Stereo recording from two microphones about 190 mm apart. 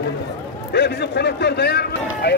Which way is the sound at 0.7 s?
60° left (ahead or behind).